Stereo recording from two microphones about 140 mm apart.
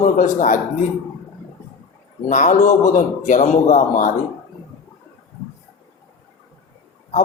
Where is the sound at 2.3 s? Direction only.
60° left (ahead or behind).